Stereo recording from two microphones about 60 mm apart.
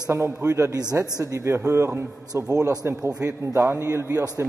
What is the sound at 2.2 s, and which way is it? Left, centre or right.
A man's voice, right.